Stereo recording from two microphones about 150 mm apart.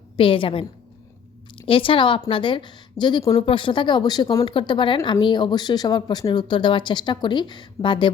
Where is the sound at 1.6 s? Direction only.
35° left (ahead or behind).